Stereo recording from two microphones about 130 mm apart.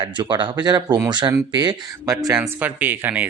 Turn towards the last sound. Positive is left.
turn(degrees=-15)  # may be behind; listen again after turning